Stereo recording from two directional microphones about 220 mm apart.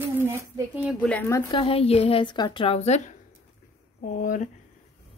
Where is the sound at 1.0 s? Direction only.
10° left (ahead or behind).